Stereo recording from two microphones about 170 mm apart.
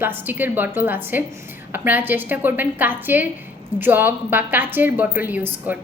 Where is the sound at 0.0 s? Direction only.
10° right (ahead or behind).